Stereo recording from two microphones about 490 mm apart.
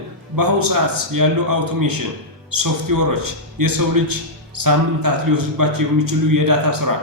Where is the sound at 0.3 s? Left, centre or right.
Right.